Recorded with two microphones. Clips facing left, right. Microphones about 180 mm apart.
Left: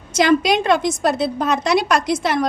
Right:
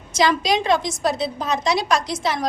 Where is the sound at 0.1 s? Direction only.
60° left (ahead or behind).